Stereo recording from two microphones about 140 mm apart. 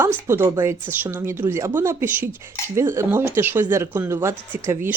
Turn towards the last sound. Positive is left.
turn(degrees=-15)  # may be behind; listen again after turning